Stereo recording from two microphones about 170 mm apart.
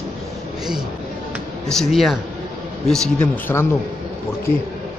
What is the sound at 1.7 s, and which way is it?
Speech, centre (ahead or behind).